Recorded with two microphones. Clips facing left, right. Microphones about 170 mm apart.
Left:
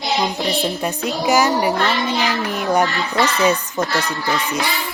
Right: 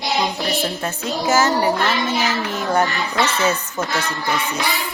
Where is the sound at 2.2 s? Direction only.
15° left (ahead or behind).